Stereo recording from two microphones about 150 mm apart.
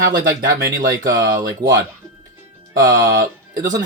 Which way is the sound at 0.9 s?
20° right (ahead or behind).